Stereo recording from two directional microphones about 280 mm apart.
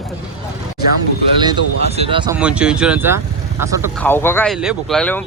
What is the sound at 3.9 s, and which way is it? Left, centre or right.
Speech, centre.